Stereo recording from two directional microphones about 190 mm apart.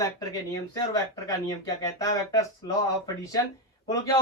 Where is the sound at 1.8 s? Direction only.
20° left (ahead or behind).